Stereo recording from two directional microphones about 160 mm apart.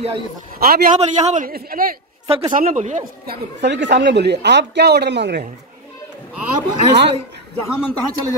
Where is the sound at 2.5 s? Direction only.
55° right (ahead or behind).